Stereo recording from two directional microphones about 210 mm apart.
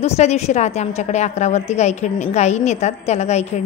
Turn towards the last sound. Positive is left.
turn(degrees=30)  # may be behind; listen again after turning